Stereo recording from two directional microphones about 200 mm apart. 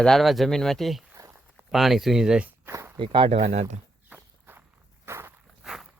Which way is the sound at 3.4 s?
35° right (ahead or behind).